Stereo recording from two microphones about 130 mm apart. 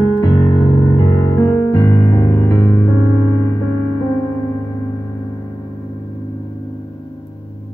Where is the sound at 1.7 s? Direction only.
15° left (ahead or behind).